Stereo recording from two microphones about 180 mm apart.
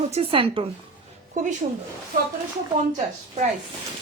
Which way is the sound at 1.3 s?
45° right (ahead or behind).